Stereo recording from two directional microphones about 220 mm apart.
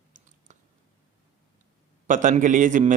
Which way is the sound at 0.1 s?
35° right (ahead or behind).